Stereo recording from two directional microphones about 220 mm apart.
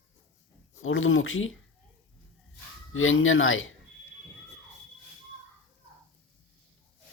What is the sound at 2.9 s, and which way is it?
Speech, 65° left (ahead or behind).